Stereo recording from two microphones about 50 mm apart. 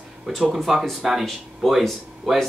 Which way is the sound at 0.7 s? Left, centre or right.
Centre.